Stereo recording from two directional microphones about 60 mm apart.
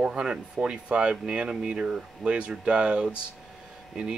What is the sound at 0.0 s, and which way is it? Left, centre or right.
Speech, centre.